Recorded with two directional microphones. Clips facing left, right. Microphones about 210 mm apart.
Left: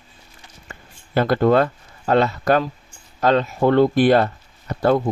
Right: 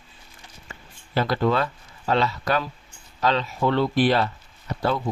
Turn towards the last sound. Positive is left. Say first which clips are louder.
# left 7 dB
turn(degrees=50)  # may be behind; listen again after turning